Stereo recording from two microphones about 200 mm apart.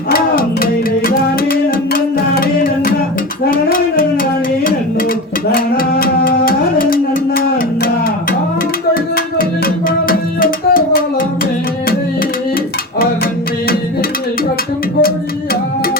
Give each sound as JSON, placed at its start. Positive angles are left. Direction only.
{"t": 0.1, "sound": "music", "side_deg": 45}
{"t": 3.4, "sound": "a sound", "side_deg": 45}
{"t": 5.5, "sound": "music", "side_deg": 45}
{"t": 9.1, "sound": "music", "side_deg": 45}